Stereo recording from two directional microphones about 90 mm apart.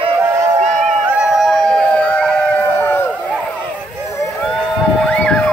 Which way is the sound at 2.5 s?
25° left (ahead or behind).